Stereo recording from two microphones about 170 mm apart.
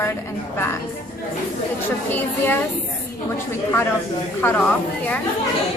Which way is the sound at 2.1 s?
10° left (ahead or behind).